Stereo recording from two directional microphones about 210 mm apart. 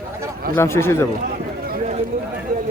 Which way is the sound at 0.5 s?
10° left (ahead or behind).